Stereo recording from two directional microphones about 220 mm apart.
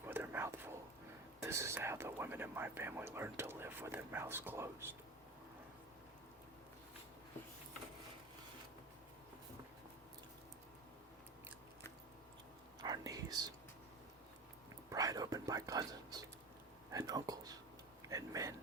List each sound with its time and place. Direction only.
0.0 s whispering: 10° right (ahead or behind)
1.4 s speech: 10° right (ahead or behind)
12.8 s whispering: 15° right (ahead or behind)
14.8 s whispering: 15° right (ahead or behind)
18.1 s a sound: 15° right (ahead or behind)